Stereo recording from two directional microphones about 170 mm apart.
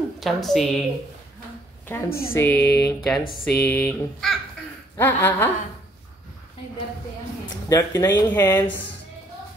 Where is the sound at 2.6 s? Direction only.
75° left (ahead or behind).